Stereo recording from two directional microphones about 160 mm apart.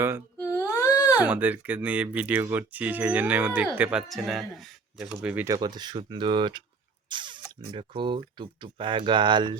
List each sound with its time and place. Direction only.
0.5 s a sound: 20° left (ahead or behind)
1.2 s speech: 10° right (ahead or behind)
5.5 s speech: 25° right (ahead or behind)